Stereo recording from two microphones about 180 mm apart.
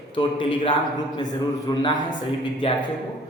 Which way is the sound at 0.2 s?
25° left (ahead or behind).